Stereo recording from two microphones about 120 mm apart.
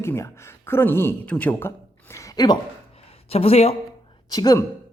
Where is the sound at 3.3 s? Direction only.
55° left (ahead or behind).